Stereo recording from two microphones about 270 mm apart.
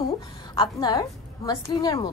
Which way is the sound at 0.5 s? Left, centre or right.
Centre.